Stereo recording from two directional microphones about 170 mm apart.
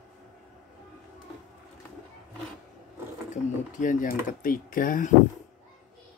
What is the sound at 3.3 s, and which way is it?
Speech, 50° left (ahead or behind).